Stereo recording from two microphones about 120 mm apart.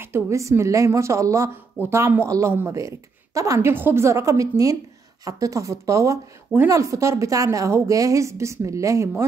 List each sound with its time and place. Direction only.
0.0 s a woman's voice: 20° right (ahead or behind)